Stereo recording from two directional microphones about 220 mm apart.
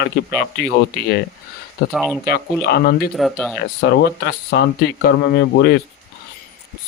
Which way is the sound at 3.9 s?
50° left (ahead or behind).